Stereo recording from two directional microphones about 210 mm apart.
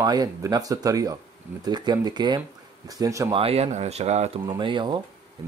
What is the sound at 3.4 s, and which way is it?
Speech, 30° right (ahead or behind).